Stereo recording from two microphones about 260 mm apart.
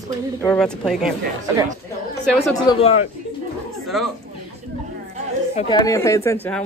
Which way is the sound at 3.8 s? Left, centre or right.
Centre.